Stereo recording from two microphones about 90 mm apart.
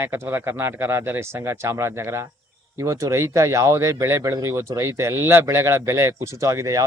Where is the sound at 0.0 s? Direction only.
25° right (ahead or behind).